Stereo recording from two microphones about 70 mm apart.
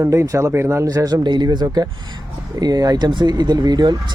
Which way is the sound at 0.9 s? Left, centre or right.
Right.